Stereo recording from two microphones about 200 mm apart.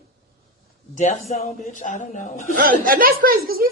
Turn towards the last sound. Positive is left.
turn(degrees=-45)  # may be behind; listen again after turning